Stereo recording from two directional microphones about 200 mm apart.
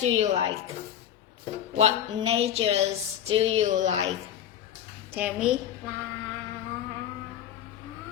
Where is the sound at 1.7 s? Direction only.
35° right (ahead or behind).